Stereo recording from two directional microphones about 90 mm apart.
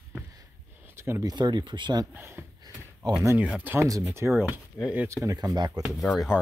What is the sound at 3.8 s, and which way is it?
Speech, 40° right (ahead or behind).